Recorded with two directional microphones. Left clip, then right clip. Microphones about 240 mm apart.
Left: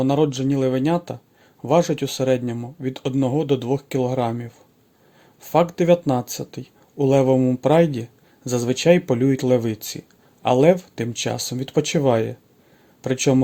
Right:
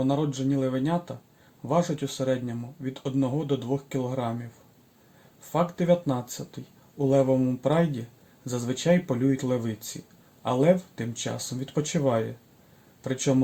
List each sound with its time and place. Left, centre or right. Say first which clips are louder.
0.0 s speech: left 7 dB; left
5.5 s speech: left 7 dB; left